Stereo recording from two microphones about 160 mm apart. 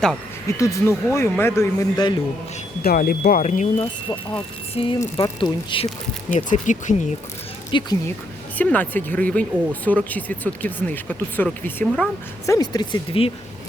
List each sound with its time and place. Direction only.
0.4 s speech: 20° left (ahead or behind)
2.8 s speech: 65° left (ahead or behind); by 3.8 s 50° left (ahead or behind)
4.7 s speech: 35° left (ahead or behind)
4.9 s speech: 20° left (ahead or behind)
5.7 s speech: 30° left (ahead or behind)
6.3 s speech: 55° left (ahead or behind)
7.7 s speech: 30° left (ahead or behind)
8.5 s speech: 10° left (ahead or behind)
12.5 s speech: 25° left (ahead or behind)